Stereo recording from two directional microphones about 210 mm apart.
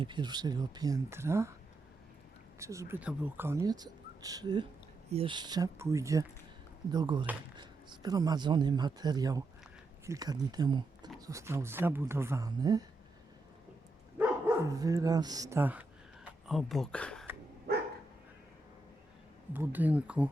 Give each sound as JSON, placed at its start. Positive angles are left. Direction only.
{"t": 0.0, "sound": "speech", "side_deg": -20}
{"t": 2.6, "sound": "speech", "side_deg": -15}
{"t": 14.2, "sound": "speech", "side_deg": -10}
{"t": 17.7, "sound": "dog", "side_deg": -50}
{"t": 19.5, "sound": "speech", "side_deg": -10}